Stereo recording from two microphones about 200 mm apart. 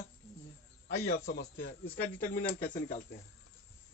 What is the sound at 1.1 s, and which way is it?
Speech, 50° left (ahead or behind).